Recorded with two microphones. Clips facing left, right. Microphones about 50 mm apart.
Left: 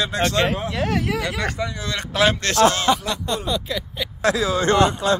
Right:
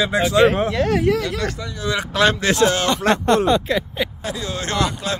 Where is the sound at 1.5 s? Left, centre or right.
Centre.